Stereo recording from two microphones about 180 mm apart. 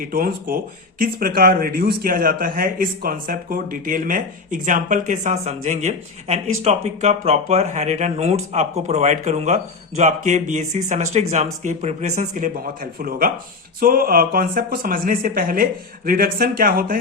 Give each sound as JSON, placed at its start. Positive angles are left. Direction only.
{"t": 0.0, "sound": "speech", "side_deg": -55}